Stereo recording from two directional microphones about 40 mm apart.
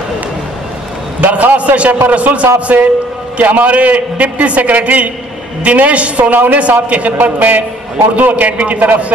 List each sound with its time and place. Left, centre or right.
1.3 s a man's voice: right
6.3 s a woman's voice: right